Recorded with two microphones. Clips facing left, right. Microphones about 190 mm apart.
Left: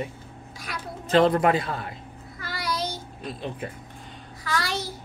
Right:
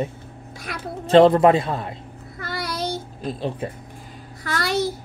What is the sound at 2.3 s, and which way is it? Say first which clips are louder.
Child singing: right 6 dB; 60° right (ahead or behind).